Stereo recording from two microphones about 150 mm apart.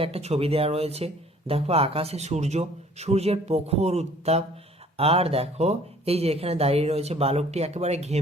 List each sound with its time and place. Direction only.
0.0 s speech: 45° right (ahead or behind)